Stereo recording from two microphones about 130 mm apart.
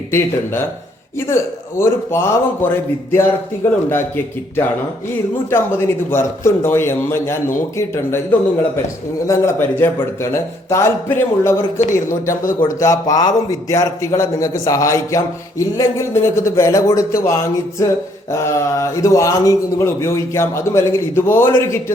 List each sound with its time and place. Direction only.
1.3 s a man's voice: 20° left (ahead or behind)
12.3 s a man's voice: 90° left
12.6 s a man's voice: 25° left (ahead or behind)